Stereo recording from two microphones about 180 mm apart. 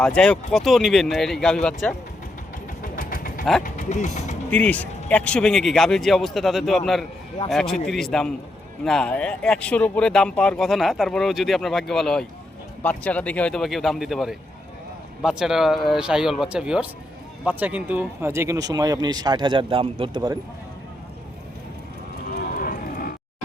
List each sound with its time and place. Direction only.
0.0 s speech: 5° left (ahead or behind)
2.8 s vehicle: 50° left (ahead or behind)
3.6 s speech: 45° left (ahead or behind)
4.5 s speech: 5° left (ahead or behind); by 20.4 s 25° right (ahead or behind)
22.5 s cattle: 50° left (ahead or behind)